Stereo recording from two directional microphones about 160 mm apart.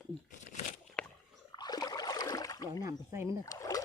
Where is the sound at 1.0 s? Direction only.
5° left (ahead or behind).